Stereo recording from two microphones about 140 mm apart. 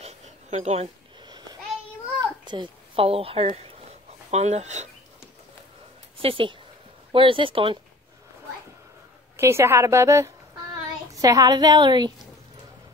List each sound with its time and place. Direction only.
0.0 s a sound: 50° right (ahead or behind)
1.2 s babbling: 30° right (ahead or behind)
2.1 s a child's voice: 35° right (ahead or behind); by 4.8 s 55° right (ahead or behind)
6.1 s speech: 40° right (ahead or behind)
9.4 s a woman's voice: 20° right (ahead or behind)